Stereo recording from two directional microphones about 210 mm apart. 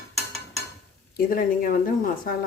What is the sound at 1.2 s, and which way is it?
A woman's voice, 40° left (ahead or behind).